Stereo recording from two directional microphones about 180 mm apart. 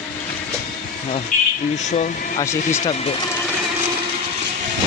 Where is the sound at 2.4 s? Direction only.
15° left (ahead or behind).